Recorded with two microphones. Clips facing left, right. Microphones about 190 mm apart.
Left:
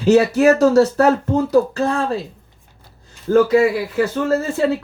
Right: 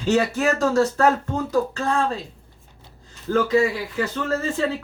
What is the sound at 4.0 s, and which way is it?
Speech, 40° left (ahead or behind).